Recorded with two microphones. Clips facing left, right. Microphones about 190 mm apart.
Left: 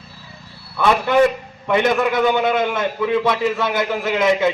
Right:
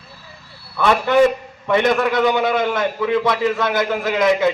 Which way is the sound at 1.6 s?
5° left (ahead or behind).